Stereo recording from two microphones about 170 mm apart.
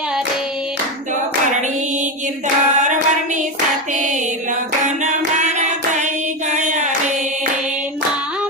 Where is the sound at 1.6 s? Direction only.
45° right (ahead or behind).